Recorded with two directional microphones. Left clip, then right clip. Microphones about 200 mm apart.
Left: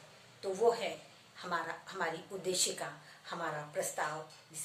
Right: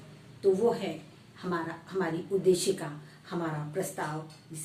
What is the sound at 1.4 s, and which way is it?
A woman's voice, 15° left (ahead or behind).